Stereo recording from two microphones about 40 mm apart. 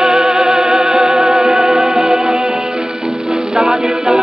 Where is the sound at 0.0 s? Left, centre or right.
Centre.